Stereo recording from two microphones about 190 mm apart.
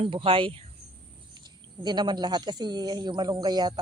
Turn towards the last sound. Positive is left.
turn(degrees=-20)  # may be behind; listen again after turning